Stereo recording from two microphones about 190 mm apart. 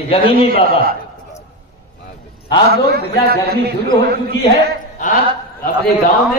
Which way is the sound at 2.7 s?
55° right (ahead or behind).